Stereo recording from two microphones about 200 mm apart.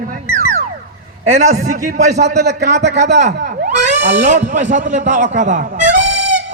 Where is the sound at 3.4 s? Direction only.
35° right (ahead or behind).